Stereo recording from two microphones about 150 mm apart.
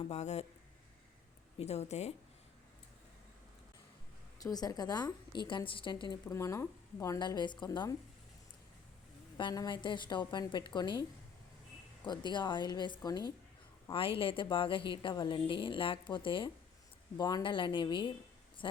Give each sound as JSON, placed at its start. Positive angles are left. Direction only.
{"t": 0.0, "sound": "speech", "side_deg": 45}
{"t": 1.5, "sound": "speech", "side_deg": 45}
{"t": 4.4, "sound": "a woman's voice", "side_deg": 25}
{"t": 6.3, "sound": "a woman's voice", "side_deg": 20}
{"t": 9.4, "sound": "a woman's voice", "side_deg": 25}
{"t": 12.0, "sound": "a woman's voice", "side_deg": 30}